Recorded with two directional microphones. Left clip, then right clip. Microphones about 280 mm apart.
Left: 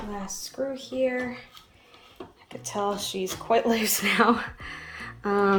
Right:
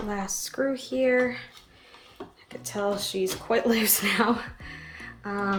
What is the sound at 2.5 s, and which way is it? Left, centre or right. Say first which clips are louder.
Speech: even; centre.